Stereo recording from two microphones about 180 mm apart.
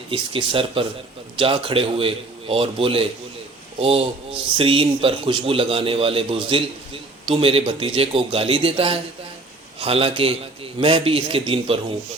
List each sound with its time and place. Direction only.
0.1 s speech: 30° right (ahead or behind)